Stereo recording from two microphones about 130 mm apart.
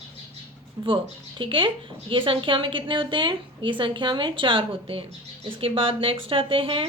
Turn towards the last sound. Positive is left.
turn(degrees=-45)  # may be behind; listen again after turning